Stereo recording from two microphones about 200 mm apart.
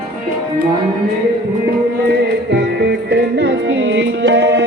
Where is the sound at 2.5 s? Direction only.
60° right (ahead or behind).